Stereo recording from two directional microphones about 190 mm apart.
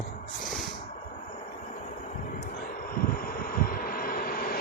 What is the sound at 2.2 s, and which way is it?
Vehicle, 45° left (ahead or behind).